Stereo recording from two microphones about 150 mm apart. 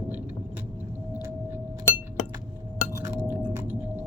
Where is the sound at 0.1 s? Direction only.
10° right (ahead or behind).